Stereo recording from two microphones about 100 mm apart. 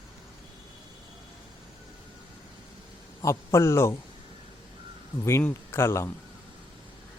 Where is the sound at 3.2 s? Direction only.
30° left (ahead or behind).